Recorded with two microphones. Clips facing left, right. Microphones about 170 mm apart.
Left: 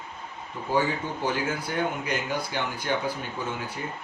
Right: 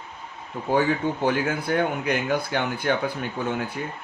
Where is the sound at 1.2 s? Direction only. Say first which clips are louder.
Right 4 dB; 55° right (ahead or behind).